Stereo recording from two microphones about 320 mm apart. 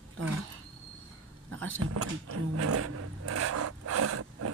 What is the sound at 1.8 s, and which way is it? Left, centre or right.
Speech, right.